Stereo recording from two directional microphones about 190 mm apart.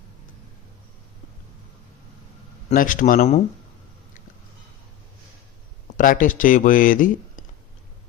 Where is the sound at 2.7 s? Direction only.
45° left (ahead or behind).